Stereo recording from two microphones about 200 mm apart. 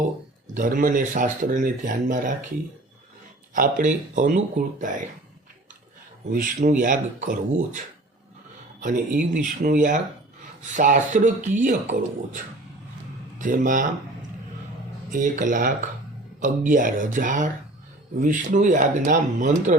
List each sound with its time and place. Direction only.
0.5 s speech: 40° right (ahead or behind)
3.5 s speech: 40° right (ahead or behind)
6.3 s speech: 40° right (ahead or behind)
8.8 s speech: 40° right (ahead or behind)
13.4 s speech: 40° right (ahead or behind)